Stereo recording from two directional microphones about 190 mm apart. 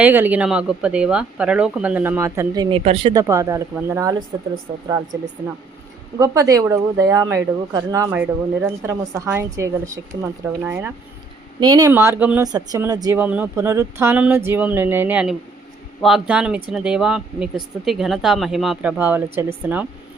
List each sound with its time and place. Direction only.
0.0 s speech: 10° right (ahead or behind)
2.6 s speech: 30° right (ahead or behind)
6.1 s speech: 15° right (ahead or behind)
12.4 s speech: 20° right (ahead or behind)